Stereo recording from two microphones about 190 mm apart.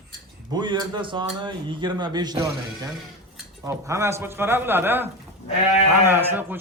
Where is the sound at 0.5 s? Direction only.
25° right (ahead or behind).